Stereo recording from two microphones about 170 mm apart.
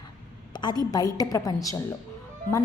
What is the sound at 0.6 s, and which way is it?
A woman's voice, 25° left (ahead or behind).